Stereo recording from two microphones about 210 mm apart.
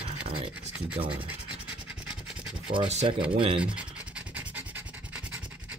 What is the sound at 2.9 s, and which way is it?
Speech, 30° right (ahead or behind).